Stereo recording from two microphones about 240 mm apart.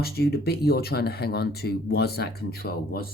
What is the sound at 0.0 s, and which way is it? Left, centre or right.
Speech, left.